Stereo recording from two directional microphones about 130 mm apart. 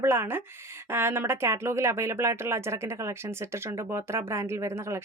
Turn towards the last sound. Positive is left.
turn(degrees=-20)  # may be behind; listen again after turning